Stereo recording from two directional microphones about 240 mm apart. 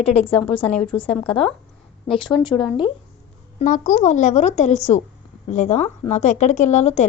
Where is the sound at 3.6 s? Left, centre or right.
Left.